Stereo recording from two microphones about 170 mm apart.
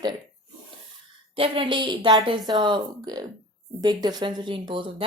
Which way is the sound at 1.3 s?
30° right (ahead or behind).